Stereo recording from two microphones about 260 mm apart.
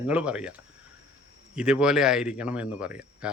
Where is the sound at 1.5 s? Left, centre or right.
Centre.